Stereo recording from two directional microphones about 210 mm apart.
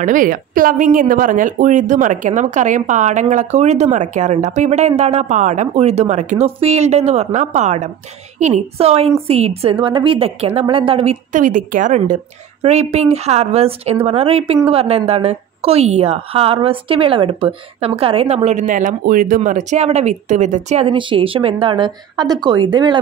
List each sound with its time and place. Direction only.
0.0 s a woman's voice: 40° right (ahead or behind); by 22.9 s 20° right (ahead or behind)